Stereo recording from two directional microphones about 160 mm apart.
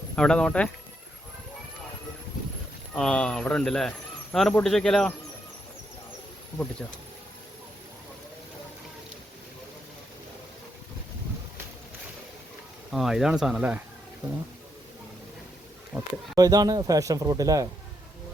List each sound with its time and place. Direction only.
0.2 s speech: 5° left (ahead or behind)
2.9 s speech: 5° left (ahead or behind)
12.9 s speech: centre (ahead or behind)
15.9 s speech: centre (ahead or behind)
16.3 s speech: 25° right (ahead or behind)